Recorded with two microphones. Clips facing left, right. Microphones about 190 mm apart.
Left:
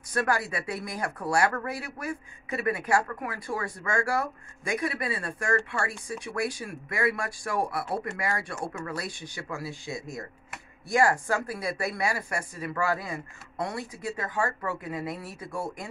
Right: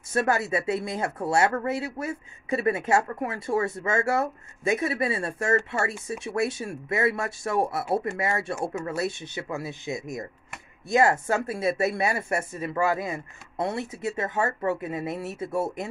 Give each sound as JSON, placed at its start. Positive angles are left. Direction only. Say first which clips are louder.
{"t": 0.1, "sound": "speech", "louder": "right 4 dB", "side_deg": -25}